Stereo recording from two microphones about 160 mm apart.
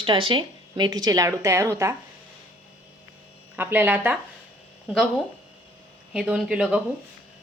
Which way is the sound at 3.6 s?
10° right (ahead or behind).